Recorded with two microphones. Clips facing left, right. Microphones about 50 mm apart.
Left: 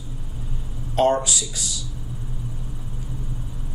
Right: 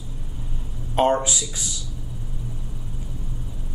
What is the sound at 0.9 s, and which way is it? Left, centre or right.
Speech, right.